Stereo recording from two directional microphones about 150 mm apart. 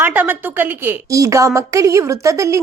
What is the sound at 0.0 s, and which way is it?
A woman's voice, 10° right (ahead or behind).